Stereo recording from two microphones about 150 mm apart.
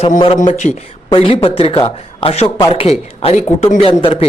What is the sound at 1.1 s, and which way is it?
Speech, 40° left (ahead or behind).